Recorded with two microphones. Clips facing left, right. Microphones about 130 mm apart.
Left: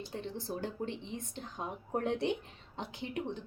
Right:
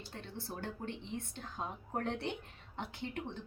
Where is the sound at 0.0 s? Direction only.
20° left (ahead or behind).